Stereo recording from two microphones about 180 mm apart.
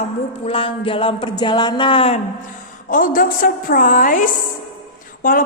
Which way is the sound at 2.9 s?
50° left (ahead or behind).